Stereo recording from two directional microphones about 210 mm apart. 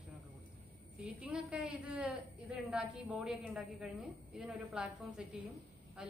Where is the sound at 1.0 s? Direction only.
5° right (ahead or behind).